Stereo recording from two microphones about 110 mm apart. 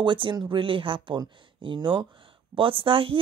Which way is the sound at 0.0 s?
45° right (ahead or behind).